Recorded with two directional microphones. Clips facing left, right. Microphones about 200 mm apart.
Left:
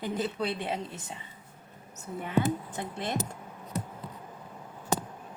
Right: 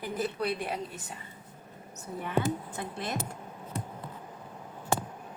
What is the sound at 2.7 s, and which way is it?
Speech, 20° left (ahead or behind).